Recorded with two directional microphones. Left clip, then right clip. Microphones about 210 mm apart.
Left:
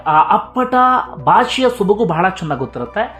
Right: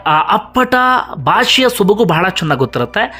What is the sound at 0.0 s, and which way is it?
Speech, 15° right (ahead or behind).